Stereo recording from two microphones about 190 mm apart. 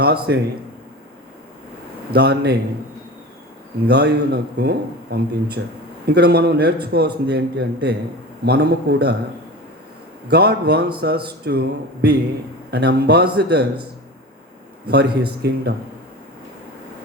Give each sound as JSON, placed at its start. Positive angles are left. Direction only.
{"t": 0.0, "sound": "a man's voice", "side_deg": -60}
{"t": 2.0, "sound": "a man's voice", "side_deg": -60}
{"t": 3.8, "sound": "a man's voice", "side_deg": -60}
{"t": 10.2, "sound": "a man's voice", "side_deg": -55}
{"t": 14.8, "sound": "a man's voice", "side_deg": -55}